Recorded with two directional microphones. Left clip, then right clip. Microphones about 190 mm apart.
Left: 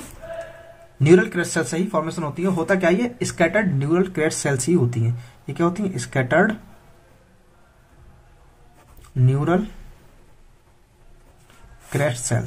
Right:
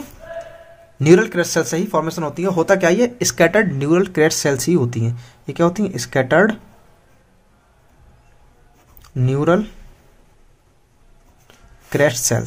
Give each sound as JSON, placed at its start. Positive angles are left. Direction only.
{"t": 0.9, "sound": "speech", "side_deg": -35}
{"t": 9.2, "sound": "speech", "side_deg": -35}
{"t": 12.0, "sound": "speech", "side_deg": -45}